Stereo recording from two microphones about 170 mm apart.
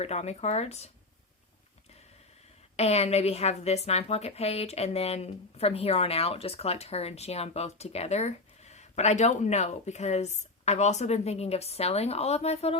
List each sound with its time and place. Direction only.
0.0 s a woman's voice: 40° left (ahead or behind)
2.7 s a woman's voice: 40° left (ahead or behind)